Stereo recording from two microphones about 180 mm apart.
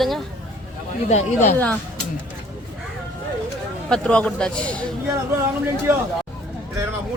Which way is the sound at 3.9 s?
5° left (ahead or behind).